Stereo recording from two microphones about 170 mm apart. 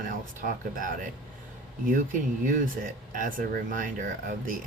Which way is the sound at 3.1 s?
50° right (ahead or behind).